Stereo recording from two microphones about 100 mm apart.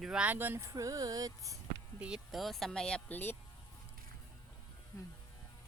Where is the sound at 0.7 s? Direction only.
35° right (ahead or behind).